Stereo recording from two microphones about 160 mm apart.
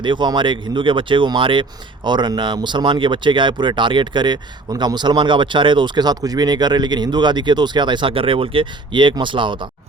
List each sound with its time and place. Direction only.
0.0 s speech: 30° right (ahead or behind)